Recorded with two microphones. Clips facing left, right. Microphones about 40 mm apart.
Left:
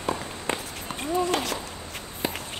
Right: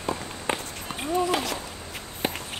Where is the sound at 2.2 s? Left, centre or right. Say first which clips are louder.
Right 1 dB; right.